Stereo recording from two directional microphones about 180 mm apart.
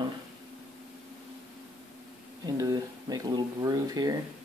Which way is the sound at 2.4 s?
20° right (ahead or behind).